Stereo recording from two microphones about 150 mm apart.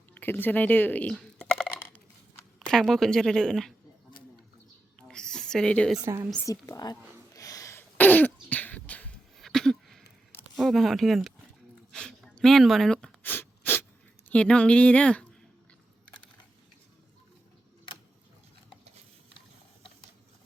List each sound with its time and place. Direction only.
0.1 s typing: 15° left (ahead or behind)
2.6 s a woman's voice: centre (ahead or behind)
4.9 s a sound: 5° left (ahead or behind)
6.0 s a woman's voice: 15° right (ahead or behind)
6.4 s speech: 20° left (ahead or behind)
7.3 s throat clearing: 20° left (ahead or behind); by 10.0 s 5° left (ahead or behind)
10.5 s speech: centre (ahead or behind)
11.9 s a sound: 5° left (ahead or behind)
14.3 s speech: 5° left (ahead or behind)